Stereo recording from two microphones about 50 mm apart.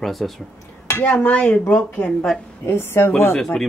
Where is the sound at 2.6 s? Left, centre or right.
Left.